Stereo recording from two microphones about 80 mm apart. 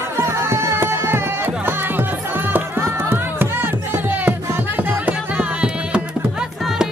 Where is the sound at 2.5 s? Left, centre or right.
Right; by 6.0 s centre.